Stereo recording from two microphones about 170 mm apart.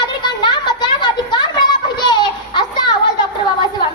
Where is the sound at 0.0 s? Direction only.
25° left (ahead or behind).